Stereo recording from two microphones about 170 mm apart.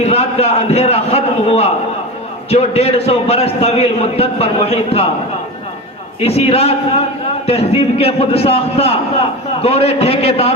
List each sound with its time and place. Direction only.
0.0 s a sound: 35° left (ahead or behind)
2.5 s a man's voice: 35° left (ahead or behind)
6.1 s a man's voice: 35° left (ahead or behind)